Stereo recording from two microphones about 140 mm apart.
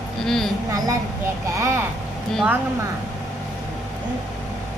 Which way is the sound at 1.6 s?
20° right (ahead or behind).